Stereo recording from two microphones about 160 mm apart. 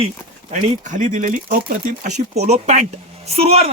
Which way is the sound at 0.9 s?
50° right (ahead or behind).